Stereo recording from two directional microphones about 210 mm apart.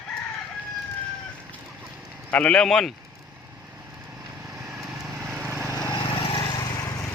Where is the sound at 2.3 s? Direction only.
5° left (ahead or behind).